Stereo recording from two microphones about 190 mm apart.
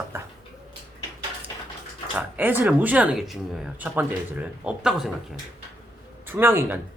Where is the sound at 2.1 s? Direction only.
10° right (ahead or behind).